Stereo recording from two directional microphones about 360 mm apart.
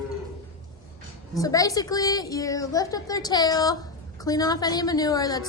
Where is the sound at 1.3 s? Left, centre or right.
Centre.